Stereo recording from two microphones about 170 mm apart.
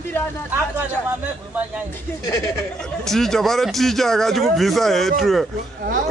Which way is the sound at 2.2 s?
20° left (ahead or behind).